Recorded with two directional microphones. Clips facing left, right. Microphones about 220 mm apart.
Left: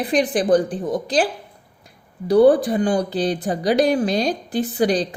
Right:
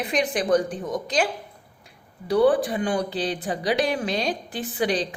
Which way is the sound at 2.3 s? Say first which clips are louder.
Left 6 dB; 40° left (ahead or behind).